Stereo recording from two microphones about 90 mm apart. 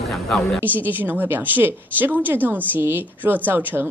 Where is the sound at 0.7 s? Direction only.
20° right (ahead or behind).